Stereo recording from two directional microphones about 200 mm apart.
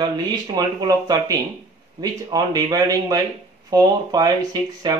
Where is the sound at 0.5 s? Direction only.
20° right (ahead or behind).